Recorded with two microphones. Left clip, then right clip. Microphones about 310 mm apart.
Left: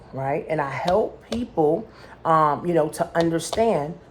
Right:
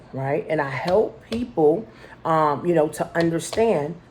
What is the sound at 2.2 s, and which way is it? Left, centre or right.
A woman's voice, centre.